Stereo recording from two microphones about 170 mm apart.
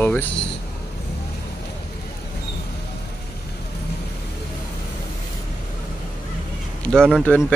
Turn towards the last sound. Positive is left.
turn(degrees=10)  # may be behind; listen again after turning